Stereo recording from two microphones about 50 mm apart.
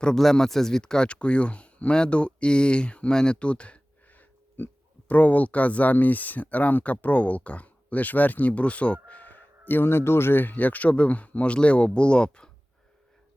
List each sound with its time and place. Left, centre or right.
0.0 s speech: centre